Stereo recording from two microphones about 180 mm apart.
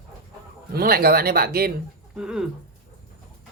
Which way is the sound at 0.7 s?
60° right (ahead or behind).